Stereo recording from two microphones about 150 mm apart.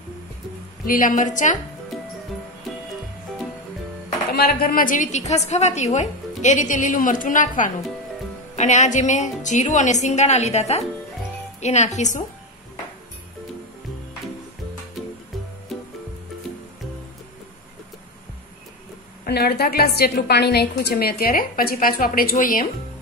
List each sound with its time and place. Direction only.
0.8 s a woman's voice: 65° left (ahead or behind)
4.3 s a woman's voice: 85° left; by 12.2 s 50° left (ahead or behind)
19.2 s a woman's voice: 90° left; by 22.7 s 70° left (ahead or behind)